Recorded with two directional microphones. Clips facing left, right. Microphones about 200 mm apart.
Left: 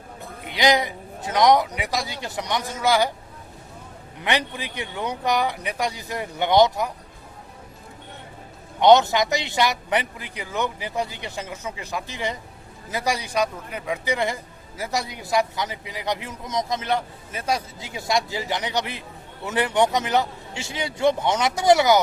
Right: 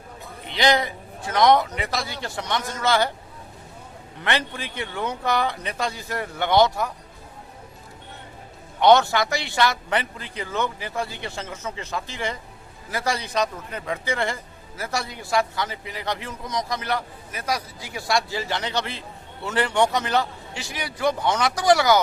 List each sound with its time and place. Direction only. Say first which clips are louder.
0.4 s a man's voice: left 1 dB; 15° left (ahead or behind)
4.2 s a man's voice: left 1 dB; 15° left (ahead or behind)
8.8 s a man's voice: left 1 dB; 20° left (ahead or behind)